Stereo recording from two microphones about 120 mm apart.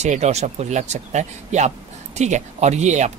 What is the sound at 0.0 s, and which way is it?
Speech, 70° right (ahead or behind).